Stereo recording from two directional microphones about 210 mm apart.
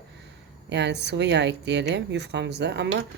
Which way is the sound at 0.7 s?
55° right (ahead or behind).